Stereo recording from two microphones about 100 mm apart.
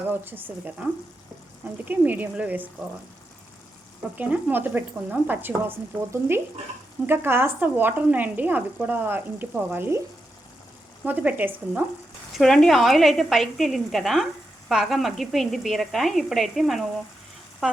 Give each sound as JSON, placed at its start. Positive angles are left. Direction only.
{"t": 0.1, "sound": "speech", "side_deg": -20}
{"t": 4.1, "sound": "speech", "side_deg": -15}
{"t": 11.0, "sound": "speech", "side_deg": -15}
{"t": 12.3, "sound": "speech", "side_deg": 5}